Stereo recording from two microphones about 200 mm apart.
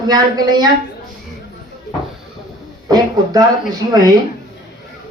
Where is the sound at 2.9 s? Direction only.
20° right (ahead or behind).